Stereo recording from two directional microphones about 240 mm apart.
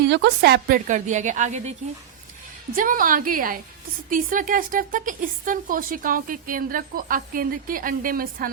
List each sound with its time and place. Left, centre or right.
0.0 s speech: right
2.7 s speech: right